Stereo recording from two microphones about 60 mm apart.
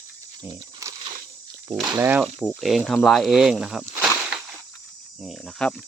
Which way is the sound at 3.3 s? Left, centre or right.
Centre.